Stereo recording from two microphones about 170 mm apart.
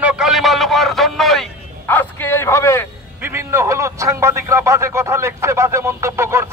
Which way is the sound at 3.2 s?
15° right (ahead or behind).